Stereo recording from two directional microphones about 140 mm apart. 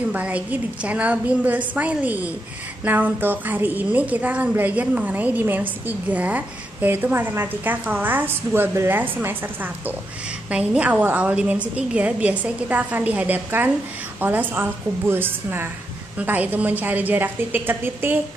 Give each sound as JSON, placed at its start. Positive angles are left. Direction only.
{"t": 0.1, "sound": "a woman's voice", "side_deg": -10}